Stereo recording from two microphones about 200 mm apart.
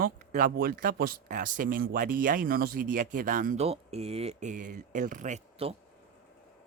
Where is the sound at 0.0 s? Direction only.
45° right (ahead or behind).